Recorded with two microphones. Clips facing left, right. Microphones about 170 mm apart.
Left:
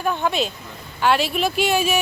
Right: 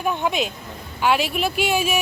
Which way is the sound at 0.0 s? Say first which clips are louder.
Left 1 dB; 10° right (ahead or behind).